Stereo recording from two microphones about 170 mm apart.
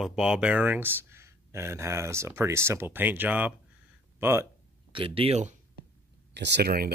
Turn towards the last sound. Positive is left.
turn(degrees=-65)  # may be behind; listen again after turning